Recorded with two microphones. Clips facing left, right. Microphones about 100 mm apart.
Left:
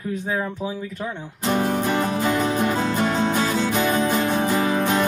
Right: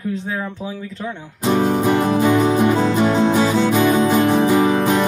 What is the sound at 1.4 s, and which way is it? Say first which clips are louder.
Music: right 5 dB; 15° right (ahead or behind).